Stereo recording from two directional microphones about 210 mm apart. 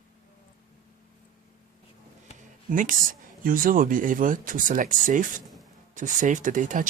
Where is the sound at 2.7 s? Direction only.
40° right (ahead or behind).